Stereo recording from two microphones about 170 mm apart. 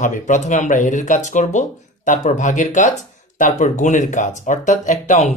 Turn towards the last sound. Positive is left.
turn(degrees=45)  # may be behind; listen again after turning